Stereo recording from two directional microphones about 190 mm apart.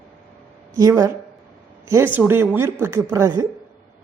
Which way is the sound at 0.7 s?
15° right (ahead or behind).